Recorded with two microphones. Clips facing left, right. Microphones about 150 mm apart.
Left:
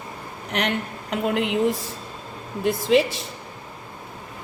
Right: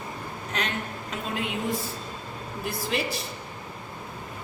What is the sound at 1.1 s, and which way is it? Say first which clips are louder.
Speech: left 9 dB; 70° left (ahead or behind).